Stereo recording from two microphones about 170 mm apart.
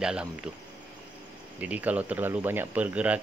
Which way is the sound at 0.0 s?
5° right (ahead or behind).